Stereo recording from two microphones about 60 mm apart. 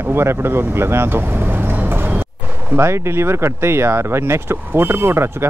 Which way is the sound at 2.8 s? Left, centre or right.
Right.